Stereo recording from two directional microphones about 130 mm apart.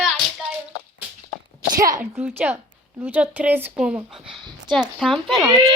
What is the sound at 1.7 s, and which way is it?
A woman's voice, 25° right (ahead or behind).